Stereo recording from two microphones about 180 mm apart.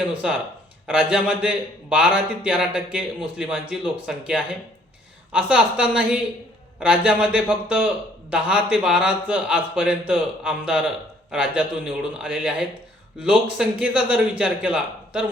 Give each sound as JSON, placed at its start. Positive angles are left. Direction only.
{"t": 0.9, "sound": "a man's voice", "side_deg": -5}